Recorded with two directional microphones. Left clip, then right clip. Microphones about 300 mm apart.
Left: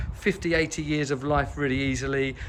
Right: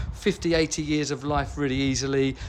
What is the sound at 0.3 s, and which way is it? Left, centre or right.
Speech, centre.